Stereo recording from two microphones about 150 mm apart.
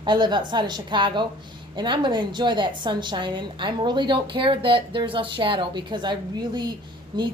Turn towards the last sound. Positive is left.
turn(degrees=-30)  # may be behind; listen again after turning